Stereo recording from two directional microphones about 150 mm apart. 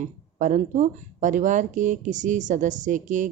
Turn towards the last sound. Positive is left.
turn(degrees=-55)  # may be behind; listen again after turning